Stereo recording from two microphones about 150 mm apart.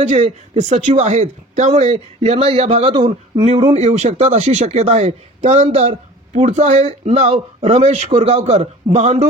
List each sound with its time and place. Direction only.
0.0 s speech: 50° right (ahead or behind)